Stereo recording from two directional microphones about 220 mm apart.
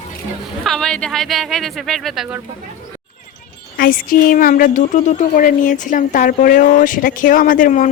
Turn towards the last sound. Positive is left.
turn(degrees=40)  # may be behind; listen again after turning